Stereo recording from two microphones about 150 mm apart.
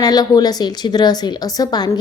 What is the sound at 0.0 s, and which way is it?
A woman's voice, 25° left (ahead or behind).